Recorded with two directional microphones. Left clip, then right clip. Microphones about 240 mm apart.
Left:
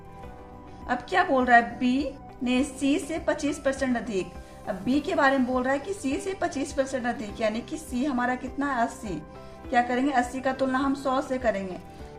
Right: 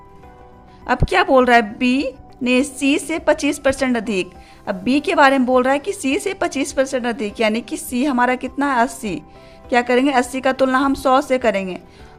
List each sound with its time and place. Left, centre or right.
0.9 s a woman's voice: right